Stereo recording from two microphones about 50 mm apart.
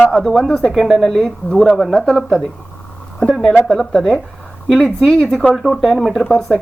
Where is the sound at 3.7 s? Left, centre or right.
Centre.